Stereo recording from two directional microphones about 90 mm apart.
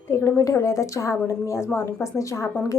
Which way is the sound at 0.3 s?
35° left (ahead or behind).